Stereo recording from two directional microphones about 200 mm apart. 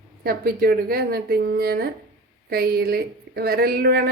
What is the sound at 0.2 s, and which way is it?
Speech, 50° right (ahead or behind).